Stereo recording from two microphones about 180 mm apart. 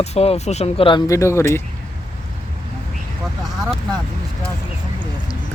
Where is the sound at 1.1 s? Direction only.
15° left (ahead or behind).